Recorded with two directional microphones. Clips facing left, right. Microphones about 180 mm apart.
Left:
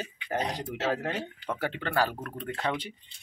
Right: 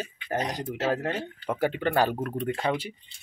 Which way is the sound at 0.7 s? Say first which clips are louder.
Right 4 dB; 5° right (ahead or behind).